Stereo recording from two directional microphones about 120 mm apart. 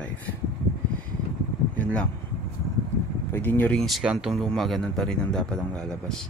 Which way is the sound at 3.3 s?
15° left (ahead or behind).